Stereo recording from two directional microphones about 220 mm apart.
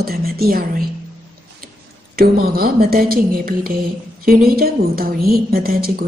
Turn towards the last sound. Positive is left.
turn(degrees=-45)  # may be behind; listen again after turning